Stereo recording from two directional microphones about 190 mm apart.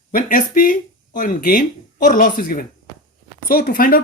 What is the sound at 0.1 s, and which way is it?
Speech, 45° left (ahead or behind).